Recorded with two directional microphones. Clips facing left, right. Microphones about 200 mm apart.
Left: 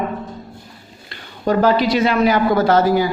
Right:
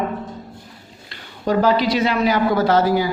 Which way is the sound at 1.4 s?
50° left (ahead or behind).